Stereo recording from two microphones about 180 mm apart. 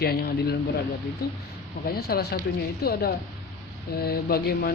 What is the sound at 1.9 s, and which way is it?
Speech, 60° left (ahead or behind).